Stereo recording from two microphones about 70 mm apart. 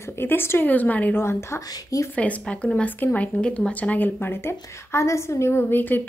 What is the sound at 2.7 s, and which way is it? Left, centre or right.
A woman's voice, left.